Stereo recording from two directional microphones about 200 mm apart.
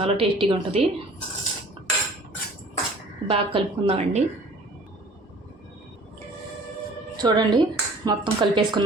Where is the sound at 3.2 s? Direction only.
25° right (ahead or behind).